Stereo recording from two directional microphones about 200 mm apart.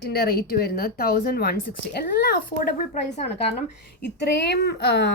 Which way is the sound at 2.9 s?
35° left (ahead or behind).